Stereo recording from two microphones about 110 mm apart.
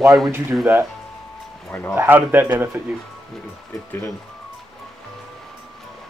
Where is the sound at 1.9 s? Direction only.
20° right (ahead or behind).